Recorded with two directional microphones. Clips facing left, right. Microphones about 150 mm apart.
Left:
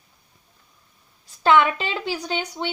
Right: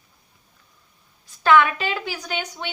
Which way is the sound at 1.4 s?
25° left (ahead or behind).